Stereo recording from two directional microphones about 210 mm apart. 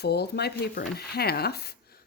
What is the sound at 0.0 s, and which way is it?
Speech, 50° left (ahead or behind).